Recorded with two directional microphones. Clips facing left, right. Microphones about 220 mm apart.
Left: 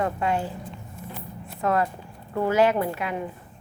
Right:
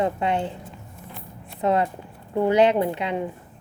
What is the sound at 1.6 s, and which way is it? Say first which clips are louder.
A woman's voice: right 2 dB; 20° right (ahead or behind).